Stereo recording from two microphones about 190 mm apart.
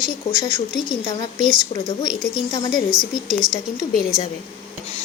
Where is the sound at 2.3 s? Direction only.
25° left (ahead or behind).